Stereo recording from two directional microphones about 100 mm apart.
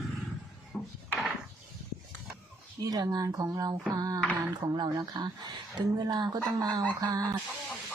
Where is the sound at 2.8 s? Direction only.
40° right (ahead or behind).